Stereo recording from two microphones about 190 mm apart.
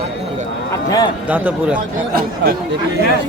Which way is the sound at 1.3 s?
10° right (ahead or behind).